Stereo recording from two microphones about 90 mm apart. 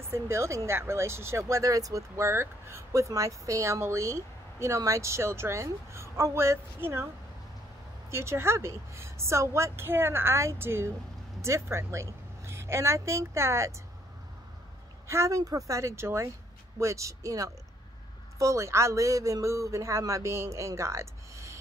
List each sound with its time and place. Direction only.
0.1 s speech: 30° right (ahead or behind)
8.1 s a woman's voice: 30° right (ahead or behind)
15.0 s speech: 35° right (ahead or behind)